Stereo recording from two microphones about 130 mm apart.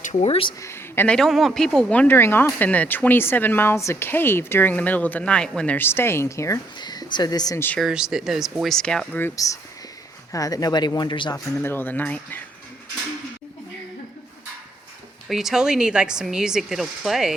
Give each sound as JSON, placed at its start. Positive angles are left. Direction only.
{"t": 0.0, "sound": "speech", "side_deg": 60}
{"t": 0.6, "sound": "a woman's voice", "side_deg": 20}
{"t": 1.1, "sound": "speech", "side_deg": 0}
{"t": 6.7, "sound": "speech", "side_deg": 35}
{"t": 7.8, "sound": "speech", "side_deg": -5}
{"t": 9.2, "sound": "a woman's voice", "side_deg": 25}
{"t": 11.5, "sound": "speech", "side_deg": 15}
{"t": 15.3, "sound": "speech", "side_deg": 0}